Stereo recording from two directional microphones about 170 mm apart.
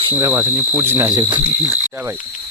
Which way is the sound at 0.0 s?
20° right (ahead or behind).